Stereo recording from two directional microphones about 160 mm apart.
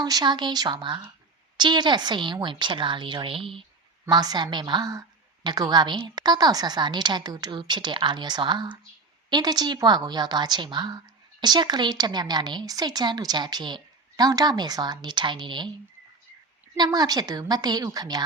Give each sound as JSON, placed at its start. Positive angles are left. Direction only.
{"t": 0.0, "sound": "a woman's voice", "side_deg": -25}
{"t": 16.7, "sound": "a woman's voice", "side_deg": -25}